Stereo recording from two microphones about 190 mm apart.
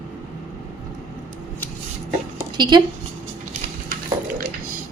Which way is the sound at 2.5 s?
25° right (ahead or behind).